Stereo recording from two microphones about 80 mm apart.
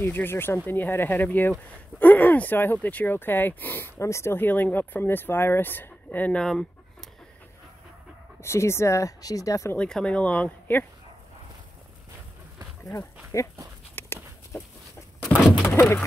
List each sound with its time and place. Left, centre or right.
0.0 s speech: left
6.4 s dog: centre
8.4 s speech: left
9.8 s speech: centre
12.9 s speech: left
13.9 s a sound: left